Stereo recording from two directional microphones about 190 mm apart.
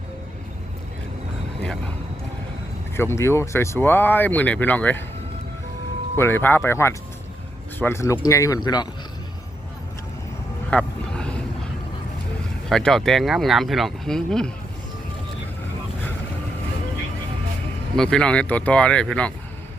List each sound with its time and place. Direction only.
2.9 s speech: 15° left (ahead or behind)
6.1 s speech: 10° left (ahead or behind)
10.7 s vehicle: 5° left (ahead or behind)
12.6 s speech: centre (ahead or behind)
17.9 s speech: 5° left (ahead or behind)